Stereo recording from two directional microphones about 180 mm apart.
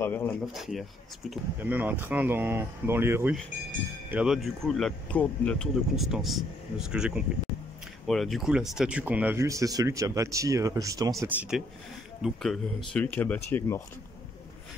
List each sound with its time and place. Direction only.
0.0 s speech: 10° left (ahead or behind)
0.5 s speech: centre (ahead or behind); by 11.2 s 20° right (ahead or behind)
11.5 s speech: 5° right (ahead or behind); by 13.8 s 15° left (ahead or behind)